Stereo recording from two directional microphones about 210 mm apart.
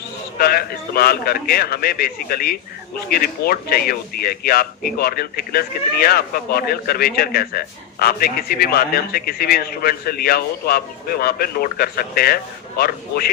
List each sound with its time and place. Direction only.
0.3 s speech: 45° left (ahead or behind)